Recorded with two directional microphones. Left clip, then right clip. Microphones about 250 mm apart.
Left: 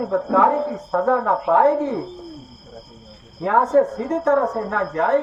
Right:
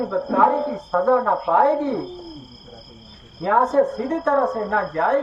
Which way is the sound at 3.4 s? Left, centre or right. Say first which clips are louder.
Left 1 dB; left.